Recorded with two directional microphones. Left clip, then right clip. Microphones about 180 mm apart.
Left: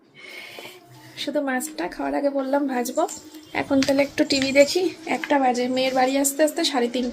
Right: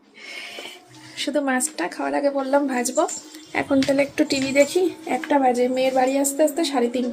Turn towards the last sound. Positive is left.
turn(degrees=0)  # may be behind; listen again after turning